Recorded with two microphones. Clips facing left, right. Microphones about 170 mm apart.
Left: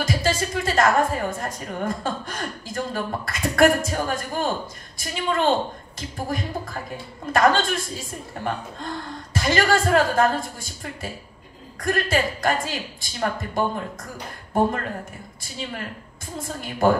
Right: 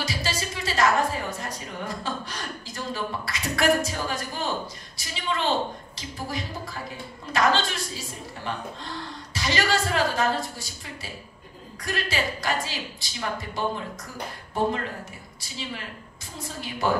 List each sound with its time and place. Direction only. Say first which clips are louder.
0.0 s a woman's voice: left 7 dB; 50° left (ahead or behind)